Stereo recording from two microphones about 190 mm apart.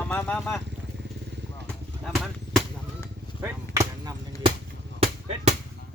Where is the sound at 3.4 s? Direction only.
15° right (ahead or behind).